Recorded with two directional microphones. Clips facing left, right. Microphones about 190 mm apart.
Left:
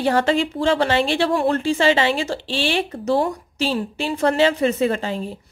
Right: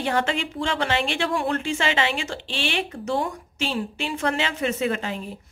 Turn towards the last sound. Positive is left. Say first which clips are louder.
# left 5 dB
turn(degrees=35)  # may be behind; listen again after turning